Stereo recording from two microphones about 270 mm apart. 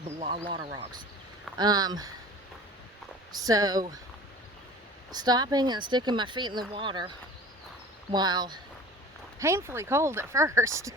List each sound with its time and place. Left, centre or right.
0.2 s speech: right
3.4 s speech: centre
5.1 s speech: centre
8.1 s speech: centre